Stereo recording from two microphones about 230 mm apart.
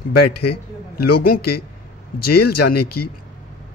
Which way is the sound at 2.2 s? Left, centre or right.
Left.